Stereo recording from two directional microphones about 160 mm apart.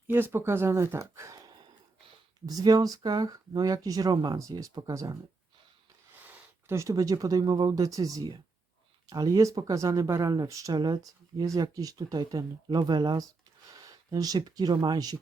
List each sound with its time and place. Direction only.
0.1 s speech: 15° right (ahead or behind)
6.2 s speech: 15° right (ahead or behind)